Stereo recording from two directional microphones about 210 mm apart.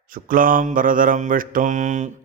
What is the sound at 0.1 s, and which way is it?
Mantra, 40° right (ahead or behind).